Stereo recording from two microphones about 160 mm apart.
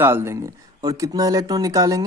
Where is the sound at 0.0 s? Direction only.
15° right (ahead or behind).